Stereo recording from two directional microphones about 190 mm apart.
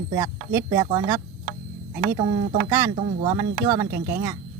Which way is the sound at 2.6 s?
15° right (ahead or behind).